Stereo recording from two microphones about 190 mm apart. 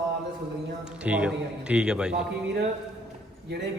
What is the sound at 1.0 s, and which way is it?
A man's voice, 5° right (ahead or behind).